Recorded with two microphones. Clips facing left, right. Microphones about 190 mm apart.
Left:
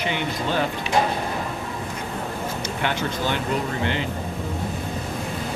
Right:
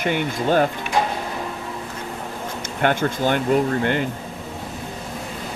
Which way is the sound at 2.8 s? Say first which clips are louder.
Right 7 dB; 50° right (ahead or behind).